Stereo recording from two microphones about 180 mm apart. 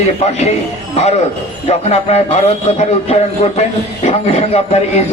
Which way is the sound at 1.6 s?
35° left (ahead or behind).